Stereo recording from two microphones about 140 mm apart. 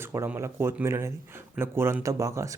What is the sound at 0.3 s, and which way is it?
Speech, 20° right (ahead or behind).